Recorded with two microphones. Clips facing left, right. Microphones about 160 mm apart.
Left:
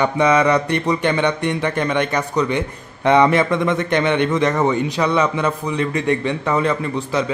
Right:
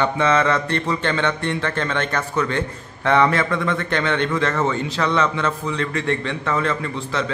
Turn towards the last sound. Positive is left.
turn(degrees=15)  # may be behind; listen again after turning